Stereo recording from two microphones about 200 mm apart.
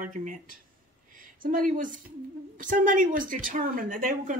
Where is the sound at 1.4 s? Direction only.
45° right (ahead or behind).